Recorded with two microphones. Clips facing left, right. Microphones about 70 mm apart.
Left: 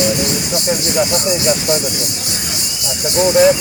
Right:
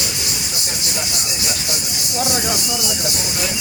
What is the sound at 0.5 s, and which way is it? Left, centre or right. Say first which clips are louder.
Speech: left 11 dB; left.